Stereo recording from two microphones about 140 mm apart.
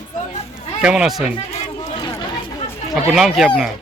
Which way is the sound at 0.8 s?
5° right (ahead or behind).